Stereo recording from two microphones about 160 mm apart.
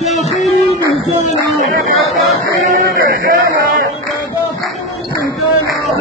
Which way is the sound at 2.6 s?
60° right (ahead or behind).